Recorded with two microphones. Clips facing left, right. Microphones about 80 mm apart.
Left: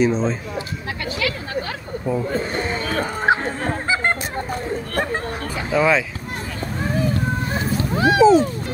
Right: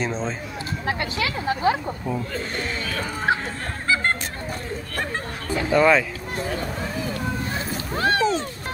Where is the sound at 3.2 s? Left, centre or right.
Left.